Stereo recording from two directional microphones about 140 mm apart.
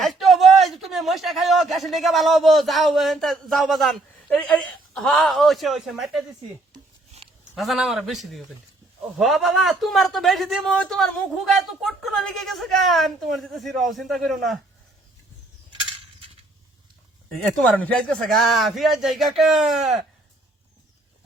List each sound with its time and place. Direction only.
0.0 s a man's voice: centre (ahead or behind)
6.7 s a sound: 50° right (ahead or behind)
7.5 s a man's voice: centre (ahead or behind)
15.7 s a sound: 40° right (ahead or behind)
17.3 s speech: 5° left (ahead or behind)
18.3 s a man's voice: centre (ahead or behind)